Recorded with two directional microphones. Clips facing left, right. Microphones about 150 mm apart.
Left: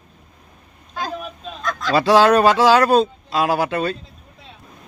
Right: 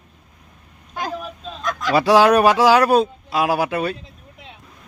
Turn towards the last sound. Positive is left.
turn(degrees=-10)  # may be behind; listen again after turning